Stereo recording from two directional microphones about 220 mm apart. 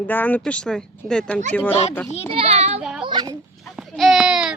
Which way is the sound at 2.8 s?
5° right (ahead or behind).